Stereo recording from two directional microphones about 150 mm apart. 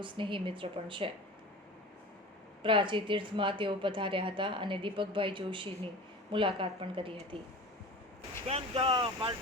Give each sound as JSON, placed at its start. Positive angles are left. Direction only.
{"t": 0.0, "sound": "a woman's voice", "side_deg": -35}
{"t": 2.6, "sound": "a woman's voice", "side_deg": -35}
{"t": 8.4, "sound": "a woman's voice", "side_deg": -40}